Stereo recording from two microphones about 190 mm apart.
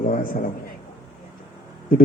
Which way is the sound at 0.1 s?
45° left (ahead or behind).